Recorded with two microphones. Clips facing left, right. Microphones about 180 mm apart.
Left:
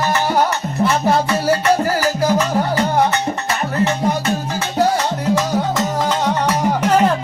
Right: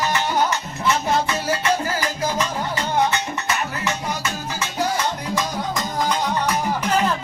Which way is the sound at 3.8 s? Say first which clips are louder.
Left 8 dB; 55° left (ahead or behind).